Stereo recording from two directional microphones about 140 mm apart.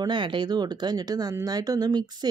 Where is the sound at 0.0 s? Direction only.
35° right (ahead or behind).